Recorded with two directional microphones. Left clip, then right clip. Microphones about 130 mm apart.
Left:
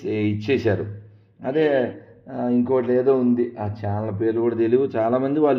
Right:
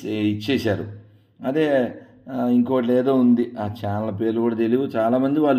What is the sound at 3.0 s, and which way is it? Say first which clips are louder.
Speech: even; 40° right (ahead or behind).